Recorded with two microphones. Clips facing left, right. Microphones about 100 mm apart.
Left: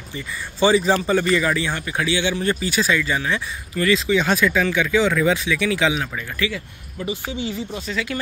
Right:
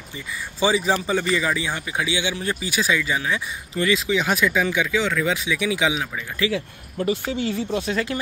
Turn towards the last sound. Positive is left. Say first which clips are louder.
# right 4 dB
turn(degrees=-60)  # may be behind; listen again after turning